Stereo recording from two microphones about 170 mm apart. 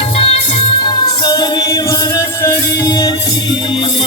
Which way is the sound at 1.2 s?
25° left (ahead or behind).